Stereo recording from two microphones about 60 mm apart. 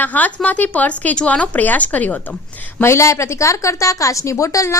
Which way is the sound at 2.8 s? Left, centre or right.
Left.